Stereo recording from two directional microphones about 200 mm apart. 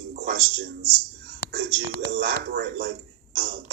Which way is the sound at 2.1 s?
50° right (ahead or behind).